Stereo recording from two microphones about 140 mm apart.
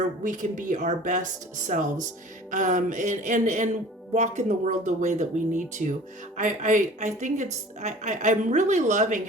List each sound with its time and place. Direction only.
0.2 s a woman's voice: 70° right (ahead or behind)